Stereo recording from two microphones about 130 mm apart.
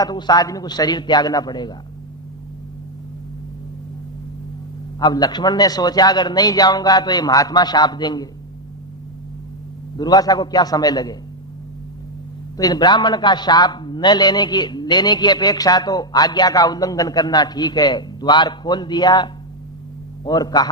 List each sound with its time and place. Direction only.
0.0 s a man's voice: 30° left (ahead or behind)
4.9 s a man's voice: 30° left (ahead or behind)
10.0 s a man's voice: 30° left (ahead or behind)
12.5 s a man's voice: 30° left (ahead or behind)